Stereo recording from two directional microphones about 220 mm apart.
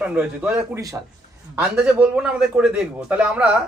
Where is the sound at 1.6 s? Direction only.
5° right (ahead or behind).